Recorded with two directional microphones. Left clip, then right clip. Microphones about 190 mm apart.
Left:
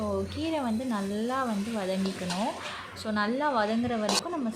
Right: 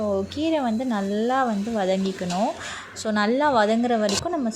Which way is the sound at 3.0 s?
30° right (ahead or behind).